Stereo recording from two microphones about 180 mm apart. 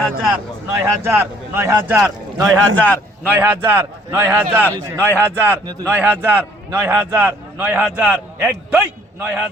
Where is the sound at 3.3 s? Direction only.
10° right (ahead or behind).